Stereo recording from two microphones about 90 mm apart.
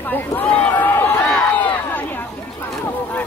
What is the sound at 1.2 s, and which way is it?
Run, 15° left (ahead or behind).